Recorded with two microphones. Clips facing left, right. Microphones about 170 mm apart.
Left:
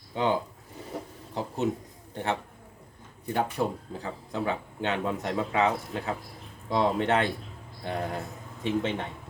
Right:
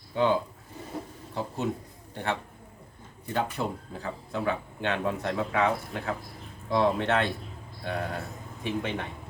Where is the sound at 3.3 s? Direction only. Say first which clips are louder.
Left 2 dB; 15° left (ahead or behind).